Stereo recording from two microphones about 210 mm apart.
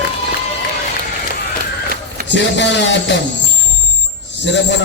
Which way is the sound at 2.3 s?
55° left (ahead or behind).